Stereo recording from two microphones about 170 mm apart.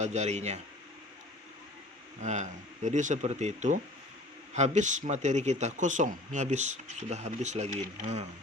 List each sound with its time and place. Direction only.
0.0 s speech: 40° right (ahead or behind)
2.2 s speech: 45° right (ahead or behind)